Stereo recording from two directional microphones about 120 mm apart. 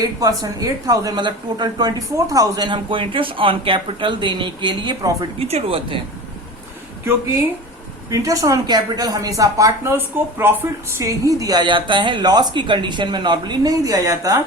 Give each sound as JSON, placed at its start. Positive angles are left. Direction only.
{"t": 0.0, "sound": "speech", "side_deg": -30}
{"t": 5.4, "sound": "speech", "side_deg": -55}
{"t": 8.1, "sound": "speech", "side_deg": -30}